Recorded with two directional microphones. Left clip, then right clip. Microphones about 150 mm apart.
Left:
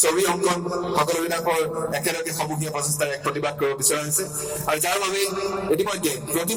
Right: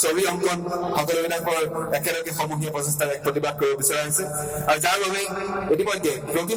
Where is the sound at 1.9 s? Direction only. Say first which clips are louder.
Right 1 dB; 45° right (ahead or behind).